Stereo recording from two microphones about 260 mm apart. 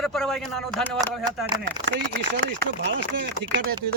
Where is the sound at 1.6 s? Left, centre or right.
Right.